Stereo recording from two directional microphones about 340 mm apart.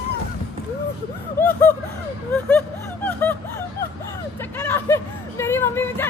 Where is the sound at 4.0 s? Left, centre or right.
Centre.